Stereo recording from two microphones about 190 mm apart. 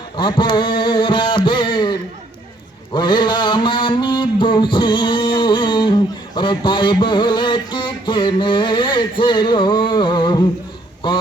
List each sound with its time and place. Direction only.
0.2 s mantra: 25° left (ahead or behind)